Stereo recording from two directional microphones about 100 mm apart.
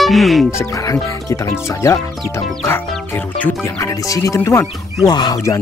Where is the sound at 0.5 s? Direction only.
35° left (ahead or behind).